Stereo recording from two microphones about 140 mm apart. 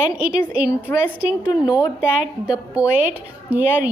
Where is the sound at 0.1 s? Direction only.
10° right (ahead or behind).